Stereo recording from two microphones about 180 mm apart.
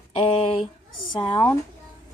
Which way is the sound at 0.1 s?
35° left (ahead or behind).